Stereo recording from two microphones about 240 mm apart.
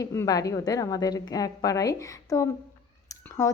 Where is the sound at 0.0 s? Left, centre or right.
Centre.